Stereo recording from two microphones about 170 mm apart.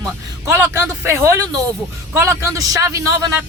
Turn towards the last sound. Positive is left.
turn(degrees=-20)  # may be behind; listen again after turning